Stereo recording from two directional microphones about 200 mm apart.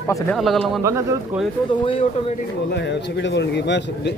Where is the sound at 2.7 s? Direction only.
60° left (ahead or behind).